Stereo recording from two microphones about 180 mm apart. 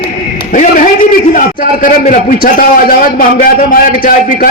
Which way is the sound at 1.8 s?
45° left (ahead or behind).